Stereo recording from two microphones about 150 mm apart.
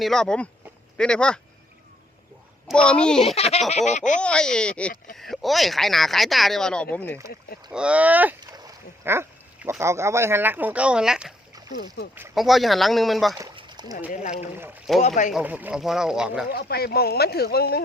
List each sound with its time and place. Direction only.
0.0 s speech: 5° left (ahead or behind)
2.6 s speech: 5° left (ahead or behind)
3.2 s baby laughter: 40° left (ahead or behind)
4.2 s speech: 5° left (ahead or behind)
7.7 s speech: 5° right (ahead or behind)
8.4 s boat: 25° right (ahead or behind)
9.0 s speech: 15° right (ahead or behind)
12.0 s speech: 90° left
12.3 s speech: centre (ahead or behind)
13.6 s rowboat: 30° right (ahead or behind)
14.1 s baby laughter: 55° left (ahead or behind)
15.3 s speech: 10° right (ahead or behind)
16.5 s speech: 90° left